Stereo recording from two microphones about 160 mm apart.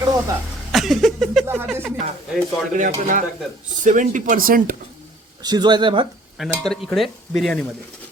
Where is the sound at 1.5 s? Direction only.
10° right (ahead or behind).